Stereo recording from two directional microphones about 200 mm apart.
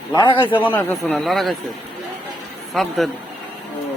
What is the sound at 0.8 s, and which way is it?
Speech, 10° left (ahead or behind).